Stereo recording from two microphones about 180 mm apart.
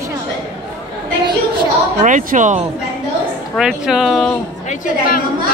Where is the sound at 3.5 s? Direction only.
Centre (ahead or behind).